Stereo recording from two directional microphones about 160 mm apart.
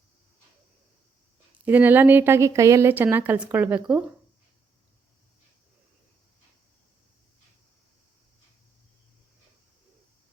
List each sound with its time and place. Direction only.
1.6 s a woman's voice: 10° right (ahead or behind)